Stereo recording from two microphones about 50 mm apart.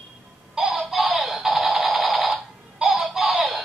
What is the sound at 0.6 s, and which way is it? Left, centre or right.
Music, centre.